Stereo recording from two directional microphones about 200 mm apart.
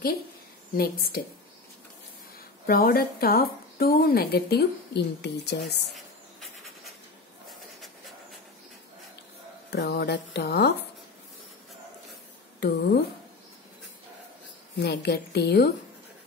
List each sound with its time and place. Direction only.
2.6 s a woman's voice: 45° left (ahead or behind)
5.9 s a sound: centre (ahead or behind)
9.7 s speech: 60° left (ahead or behind)
12.5 s speech: 55° left (ahead or behind)
14.8 s speech: 55° left (ahead or behind)